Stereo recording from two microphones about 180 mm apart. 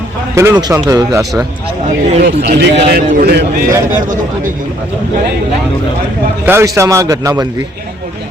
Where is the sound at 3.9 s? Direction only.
45° right (ahead or behind).